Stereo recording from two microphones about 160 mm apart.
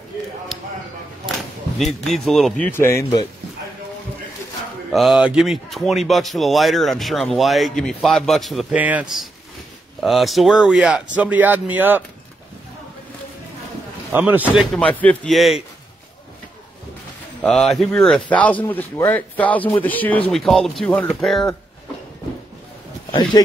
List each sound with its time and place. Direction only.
1.8 s speech: centre (ahead or behind)
2.6 s speech: 15° left (ahead or behind)
4.9 s speech: centre (ahead or behind)
14.1 s speech: 10° right (ahead or behind)
14.8 s speech: 10° left (ahead or behind)
17.4 s speech: 5° left (ahead or behind)